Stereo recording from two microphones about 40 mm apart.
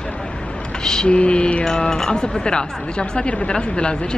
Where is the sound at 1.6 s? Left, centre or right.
Centre.